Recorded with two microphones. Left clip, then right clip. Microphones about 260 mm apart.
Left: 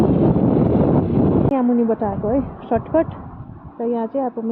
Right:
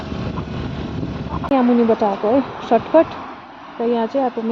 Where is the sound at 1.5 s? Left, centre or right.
Centre.